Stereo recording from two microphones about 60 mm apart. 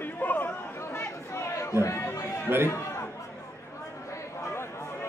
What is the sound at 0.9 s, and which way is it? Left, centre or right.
Chatter, left.